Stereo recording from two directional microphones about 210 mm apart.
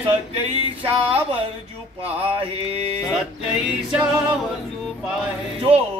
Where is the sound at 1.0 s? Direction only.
25° right (ahead or behind).